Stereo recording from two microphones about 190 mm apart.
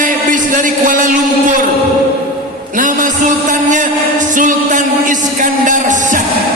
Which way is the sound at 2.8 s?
45° right (ahead or behind).